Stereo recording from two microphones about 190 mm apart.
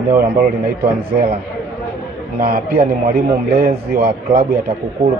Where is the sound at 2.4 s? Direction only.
50° right (ahead or behind).